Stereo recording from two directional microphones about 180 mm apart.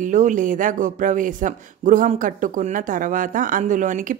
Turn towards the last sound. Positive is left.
turn(degrees=-45)  # may be behind; listen again after turning